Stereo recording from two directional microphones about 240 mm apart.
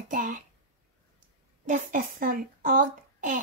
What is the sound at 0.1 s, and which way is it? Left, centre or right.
Speech, right.